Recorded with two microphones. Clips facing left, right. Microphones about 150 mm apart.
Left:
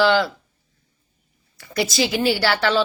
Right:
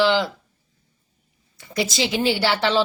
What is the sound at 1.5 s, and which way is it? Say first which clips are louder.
A woman's voice: left 2 dB; 20° right (ahead or behind).